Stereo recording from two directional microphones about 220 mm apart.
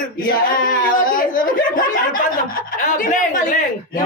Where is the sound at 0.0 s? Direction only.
40° left (ahead or behind).